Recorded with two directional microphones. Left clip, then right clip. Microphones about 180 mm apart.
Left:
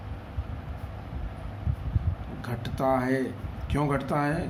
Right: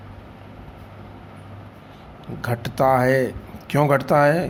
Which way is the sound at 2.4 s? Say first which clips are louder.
Right 9 dB; 55° right (ahead or behind).